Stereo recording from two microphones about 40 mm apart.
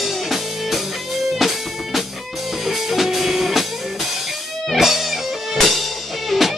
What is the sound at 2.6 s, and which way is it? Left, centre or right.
Music, centre.